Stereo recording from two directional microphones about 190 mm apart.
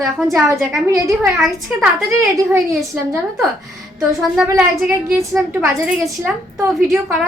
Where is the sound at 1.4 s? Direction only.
Centre (ahead or behind).